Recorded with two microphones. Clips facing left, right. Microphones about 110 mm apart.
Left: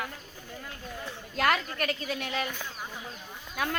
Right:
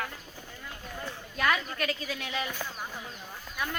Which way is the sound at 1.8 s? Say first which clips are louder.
Left 1 dB; 50° left (ahead or behind).